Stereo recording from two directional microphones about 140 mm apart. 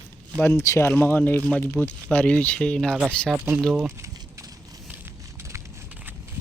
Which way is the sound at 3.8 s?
20° right (ahead or behind).